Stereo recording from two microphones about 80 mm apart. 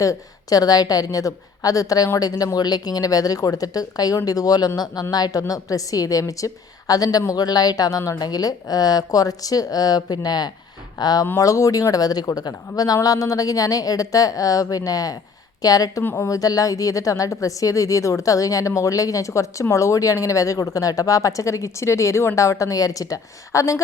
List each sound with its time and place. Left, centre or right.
0.0 s a woman's voice: left
16.0 s a woman's voice: left